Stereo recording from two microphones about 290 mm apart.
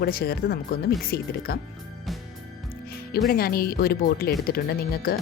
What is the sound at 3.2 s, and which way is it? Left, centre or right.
Speech, left.